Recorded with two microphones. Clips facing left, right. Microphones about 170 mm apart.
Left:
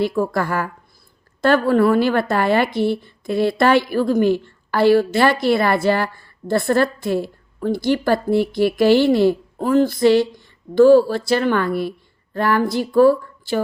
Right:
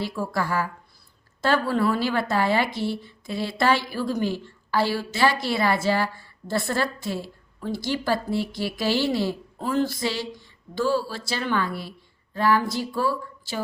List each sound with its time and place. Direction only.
0.0 s a woman's voice: 55° left (ahead or behind)